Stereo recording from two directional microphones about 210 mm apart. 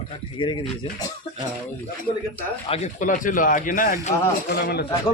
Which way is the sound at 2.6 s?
30° left (ahead or behind).